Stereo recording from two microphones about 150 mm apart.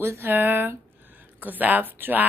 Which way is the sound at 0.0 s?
15° right (ahead or behind).